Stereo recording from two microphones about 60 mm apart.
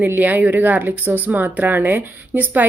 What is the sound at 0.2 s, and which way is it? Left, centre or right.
A woman's voice, right.